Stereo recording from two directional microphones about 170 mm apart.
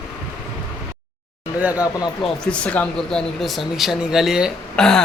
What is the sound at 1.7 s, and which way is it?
Speech, 20° left (ahead or behind).